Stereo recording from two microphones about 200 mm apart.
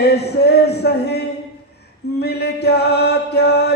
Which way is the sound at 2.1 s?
55° left (ahead or behind).